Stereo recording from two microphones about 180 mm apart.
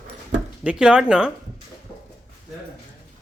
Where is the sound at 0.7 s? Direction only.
5° right (ahead or behind).